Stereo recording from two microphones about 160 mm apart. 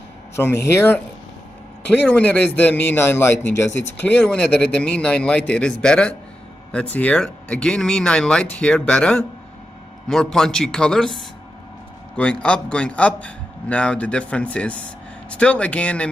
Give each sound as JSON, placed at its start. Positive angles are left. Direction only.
{"t": 0.7, "sound": "a man's voice", "side_deg": 15}
{"t": 2.0, "sound": "a man's voice", "side_deg": 10}